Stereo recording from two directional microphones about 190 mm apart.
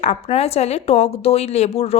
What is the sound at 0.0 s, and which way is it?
A woman's voice, 35° left (ahead or behind).